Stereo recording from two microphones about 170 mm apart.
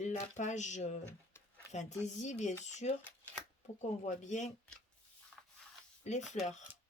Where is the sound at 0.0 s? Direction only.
45° left (ahead or behind).